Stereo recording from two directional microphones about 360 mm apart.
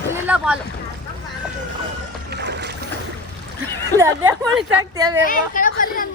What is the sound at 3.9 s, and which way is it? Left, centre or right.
A woman's voice, centre.